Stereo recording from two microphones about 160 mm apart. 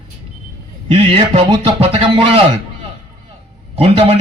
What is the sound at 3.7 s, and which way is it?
Speech, 40° right (ahead or behind).